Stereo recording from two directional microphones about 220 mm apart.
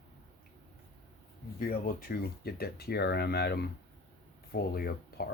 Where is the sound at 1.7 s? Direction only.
45° left (ahead or behind).